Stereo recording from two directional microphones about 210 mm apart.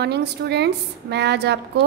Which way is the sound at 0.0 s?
50° right (ahead or behind).